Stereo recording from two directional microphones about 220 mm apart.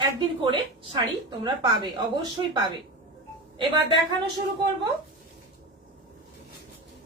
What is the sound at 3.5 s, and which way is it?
Speech, 20° right (ahead or behind).